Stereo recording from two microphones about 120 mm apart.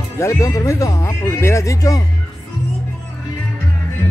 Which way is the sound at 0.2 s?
25° left (ahead or behind).